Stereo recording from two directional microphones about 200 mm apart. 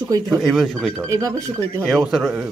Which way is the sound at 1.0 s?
15° right (ahead or behind).